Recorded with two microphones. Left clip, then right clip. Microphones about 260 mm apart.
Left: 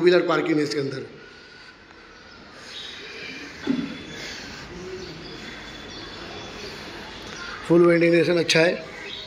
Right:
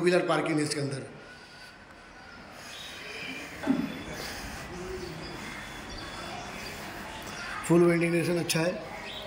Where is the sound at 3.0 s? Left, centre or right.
Centre.